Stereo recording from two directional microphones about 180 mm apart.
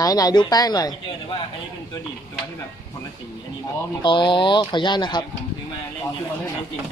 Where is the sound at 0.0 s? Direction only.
20° left (ahead or behind).